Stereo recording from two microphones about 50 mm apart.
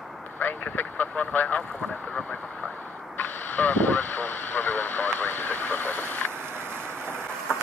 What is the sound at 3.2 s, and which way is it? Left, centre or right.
Vehicle, left.